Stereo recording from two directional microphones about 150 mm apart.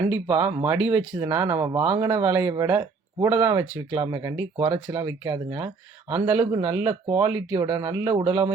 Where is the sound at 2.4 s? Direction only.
25° right (ahead or behind).